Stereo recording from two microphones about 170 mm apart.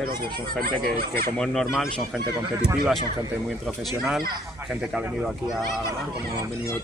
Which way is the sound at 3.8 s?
Centre (ahead or behind).